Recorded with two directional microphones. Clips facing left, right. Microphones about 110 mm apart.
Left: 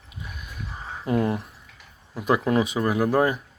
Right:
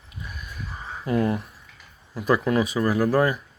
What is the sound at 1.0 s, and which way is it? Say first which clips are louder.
Speech: even; 20° left (ahead or behind).